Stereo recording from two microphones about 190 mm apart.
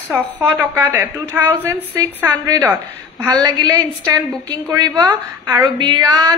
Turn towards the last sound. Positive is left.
turn(degrees=-20)  # may be behind; listen again after turning